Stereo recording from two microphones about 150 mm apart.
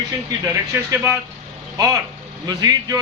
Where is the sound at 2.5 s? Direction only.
25° right (ahead or behind).